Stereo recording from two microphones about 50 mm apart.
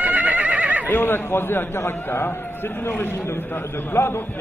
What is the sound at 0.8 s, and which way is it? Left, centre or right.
A man's voice, left.